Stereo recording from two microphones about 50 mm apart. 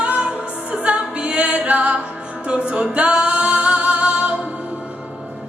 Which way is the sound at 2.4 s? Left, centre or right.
Right.